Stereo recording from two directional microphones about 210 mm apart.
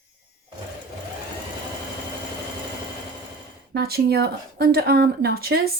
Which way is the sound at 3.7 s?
50° right (ahead or behind).